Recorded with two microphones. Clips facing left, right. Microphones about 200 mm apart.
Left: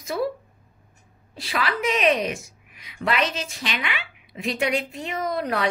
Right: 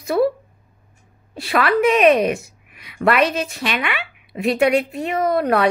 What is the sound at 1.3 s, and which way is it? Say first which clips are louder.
Speech: right 9 dB; 60° right (ahead or behind).